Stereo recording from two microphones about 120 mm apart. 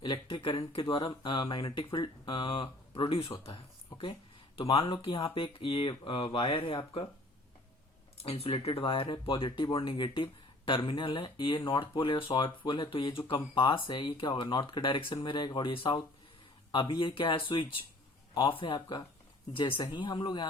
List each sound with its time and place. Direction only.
0.0 s speech: 40° left (ahead or behind)
8.2 s speech: 55° left (ahead or behind); by 20.5 s 40° left (ahead or behind)